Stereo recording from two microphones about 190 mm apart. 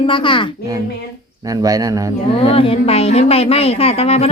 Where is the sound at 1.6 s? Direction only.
20° right (ahead or behind).